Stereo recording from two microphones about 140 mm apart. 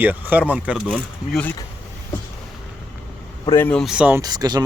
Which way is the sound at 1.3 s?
10° left (ahead or behind).